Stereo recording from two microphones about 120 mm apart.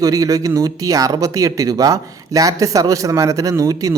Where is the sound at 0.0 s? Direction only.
30° right (ahead or behind).